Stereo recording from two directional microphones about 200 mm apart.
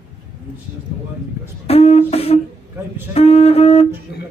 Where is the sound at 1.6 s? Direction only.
30° left (ahead or behind).